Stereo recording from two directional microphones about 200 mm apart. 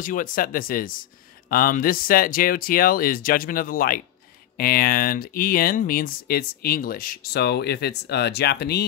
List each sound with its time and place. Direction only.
0.0 s speech: 40° left (ahead or behind)